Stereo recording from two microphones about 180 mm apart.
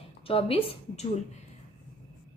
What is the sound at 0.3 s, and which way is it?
Speech, 30° left (ahead or behind).